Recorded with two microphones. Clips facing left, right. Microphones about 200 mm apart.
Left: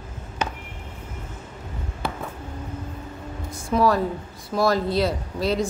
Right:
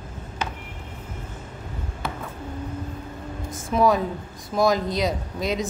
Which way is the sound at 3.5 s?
Centre (ahead or behind).